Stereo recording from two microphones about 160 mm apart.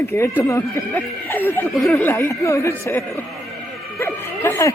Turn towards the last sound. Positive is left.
turn(degrees=15)  # may be behind; listen again after turning